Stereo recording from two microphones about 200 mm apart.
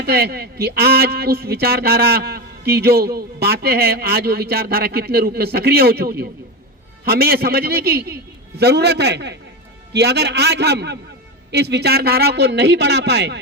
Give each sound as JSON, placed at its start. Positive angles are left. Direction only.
{"t": 0.0, "sound": "a man's voice", "side_deg": -50}